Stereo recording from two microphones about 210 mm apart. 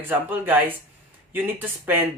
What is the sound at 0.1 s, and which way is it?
Speech, 10° right (ahead or behind).